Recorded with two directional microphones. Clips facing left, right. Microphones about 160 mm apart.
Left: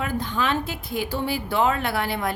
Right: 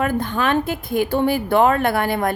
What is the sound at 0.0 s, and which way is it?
Speech, 55° right (ahead or behind).